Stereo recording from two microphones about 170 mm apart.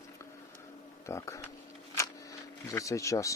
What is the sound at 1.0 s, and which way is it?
Speech, 15° left (ahead or behind).